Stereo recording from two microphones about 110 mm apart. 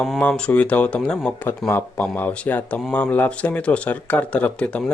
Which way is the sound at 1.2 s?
20° left (ahead or behind).